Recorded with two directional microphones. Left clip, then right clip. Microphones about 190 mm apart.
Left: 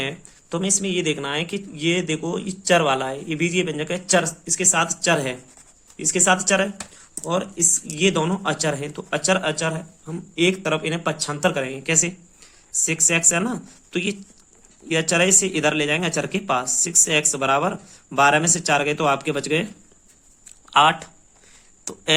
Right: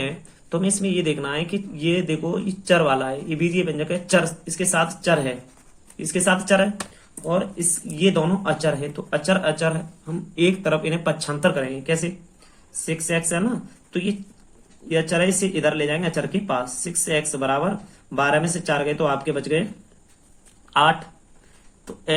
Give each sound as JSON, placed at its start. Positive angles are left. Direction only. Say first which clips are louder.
{"t": 0.5, "sound": "speech", "louder": "even", "side_deg": 35}
{"t": 20.7, "sound": "speech", "louder": "left 2 dB", "side_deg": 50}